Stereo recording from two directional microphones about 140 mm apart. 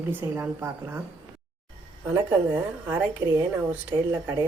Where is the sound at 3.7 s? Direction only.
10° right (ahead or behind).